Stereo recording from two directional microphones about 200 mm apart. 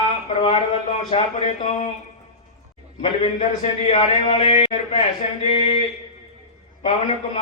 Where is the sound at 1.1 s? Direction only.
30° left (ahead or behind).